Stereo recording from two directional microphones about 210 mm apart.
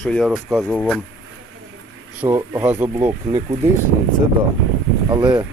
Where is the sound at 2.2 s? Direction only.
10° right (ahead or behind).